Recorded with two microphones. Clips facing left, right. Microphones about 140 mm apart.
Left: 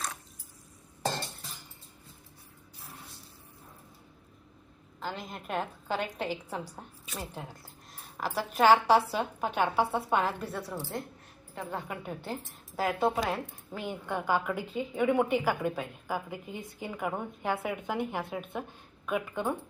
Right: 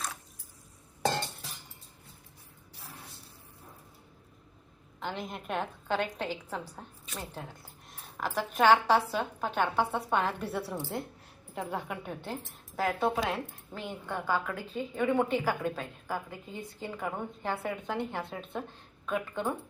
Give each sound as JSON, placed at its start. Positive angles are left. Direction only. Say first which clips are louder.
{"t": 4.9, "sound": "a woman's voice", "louder": "right 1 dB", "side_deg": 0}
{"t": 10.4, "sound": "a woman's voice", "louder": "right 2 dB", "side_deg": 0}
{"t": 13.7, "sound": "a woman's voice", "louder": "left 3 dB", "side_deg": 15}